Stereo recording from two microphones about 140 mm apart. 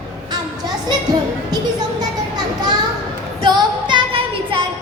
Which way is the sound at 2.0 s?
30° right (ahead or behind).